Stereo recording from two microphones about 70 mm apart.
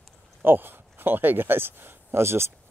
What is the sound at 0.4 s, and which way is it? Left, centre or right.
Speech, right.